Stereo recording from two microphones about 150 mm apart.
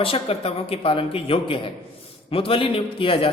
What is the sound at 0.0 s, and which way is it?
A man's voice, 40° left (ahead or behind).